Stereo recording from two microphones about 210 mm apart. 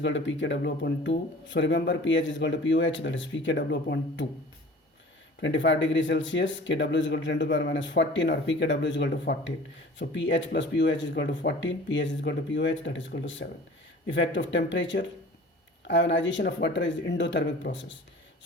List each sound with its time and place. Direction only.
0.0 s speech: 60° left (ahead or behind)
5.4 s speech: 60° left (ahead or behind)